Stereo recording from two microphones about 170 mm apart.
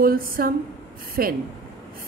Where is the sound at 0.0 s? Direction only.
60° right (ahead or behind).